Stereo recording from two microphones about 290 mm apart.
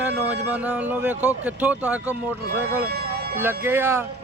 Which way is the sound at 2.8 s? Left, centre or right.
Right.